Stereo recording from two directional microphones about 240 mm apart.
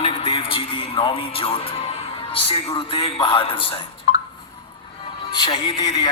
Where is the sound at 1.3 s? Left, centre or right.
Left.